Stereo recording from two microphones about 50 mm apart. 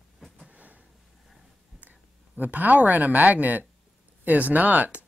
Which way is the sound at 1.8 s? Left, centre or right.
Right.